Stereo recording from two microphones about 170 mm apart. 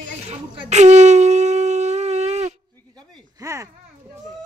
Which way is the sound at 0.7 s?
40° right (ahead or behind).